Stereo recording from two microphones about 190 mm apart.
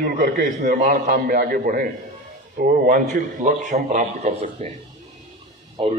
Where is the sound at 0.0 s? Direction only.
45° right (ahead or behind).